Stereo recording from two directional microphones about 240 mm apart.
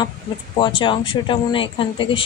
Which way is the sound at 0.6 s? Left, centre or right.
Left.